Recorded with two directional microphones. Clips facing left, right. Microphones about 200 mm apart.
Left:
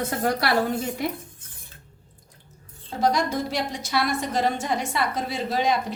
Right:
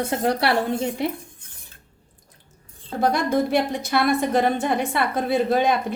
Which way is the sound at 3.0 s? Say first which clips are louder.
Right 3 dB; 55° right (ahead or behind).